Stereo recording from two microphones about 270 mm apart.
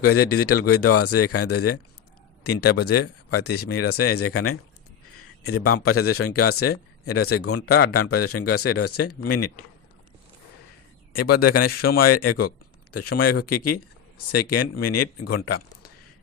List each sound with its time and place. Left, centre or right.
0.0 s speech: left
11.1 s speech: left